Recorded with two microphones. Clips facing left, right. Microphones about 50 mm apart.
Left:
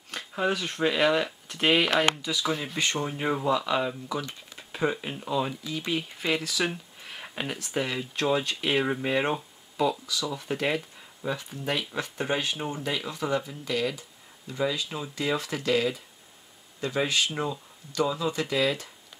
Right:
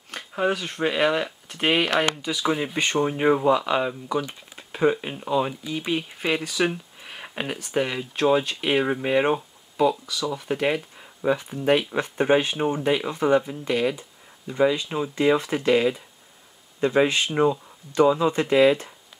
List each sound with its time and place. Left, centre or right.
0.1 s speech: centre
10.6 s speech: centre